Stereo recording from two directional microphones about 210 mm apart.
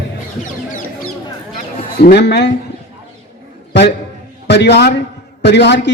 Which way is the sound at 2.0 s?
55° left (ahead or behind).